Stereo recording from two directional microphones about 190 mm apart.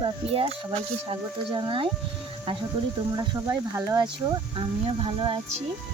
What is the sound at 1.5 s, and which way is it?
Speech, 25° right (ahead or behind).